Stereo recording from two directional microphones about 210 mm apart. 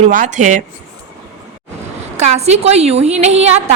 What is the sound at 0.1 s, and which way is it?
Speech, 40° right (ahead or behind).